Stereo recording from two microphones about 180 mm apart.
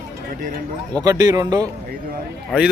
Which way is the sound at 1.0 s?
20° right (ahead or behind).